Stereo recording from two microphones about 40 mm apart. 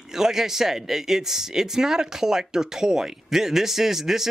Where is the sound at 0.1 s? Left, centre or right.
Centre.